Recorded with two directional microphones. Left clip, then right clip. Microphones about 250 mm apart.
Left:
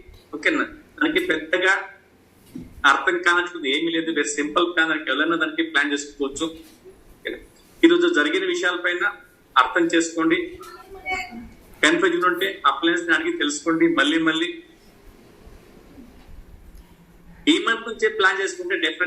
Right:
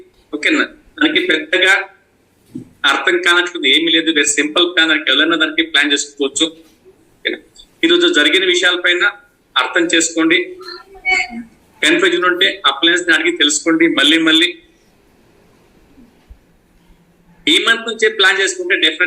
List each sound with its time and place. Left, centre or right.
0.3 s a sound: right
2.8 s a man's voice: right
7.8 s a man's voice: right
17.4 s a man's voice: right